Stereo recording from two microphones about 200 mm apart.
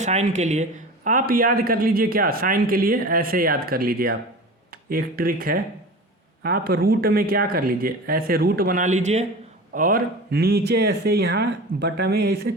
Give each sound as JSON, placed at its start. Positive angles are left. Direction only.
{"t": 0.0, "sound": "speech", "side_deg": -35}
{"t": 9.7, "sound": "speech", "side_deg": -45}